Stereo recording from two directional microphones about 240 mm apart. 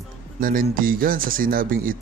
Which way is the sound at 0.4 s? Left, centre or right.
Right.